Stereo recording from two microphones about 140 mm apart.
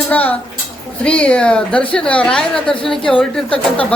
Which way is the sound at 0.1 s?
10° left (ahead or behind).